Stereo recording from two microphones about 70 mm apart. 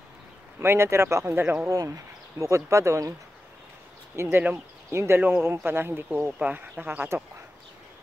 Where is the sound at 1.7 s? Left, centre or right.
Right.